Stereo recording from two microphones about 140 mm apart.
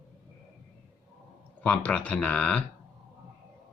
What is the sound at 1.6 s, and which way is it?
Speech, 10° left (ahead or behind).